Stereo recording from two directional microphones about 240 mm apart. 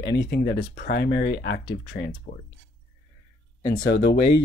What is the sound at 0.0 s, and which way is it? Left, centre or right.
Speech, left.